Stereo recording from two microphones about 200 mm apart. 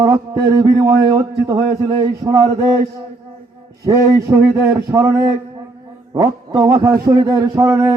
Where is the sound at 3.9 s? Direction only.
15° right (ahead or behind).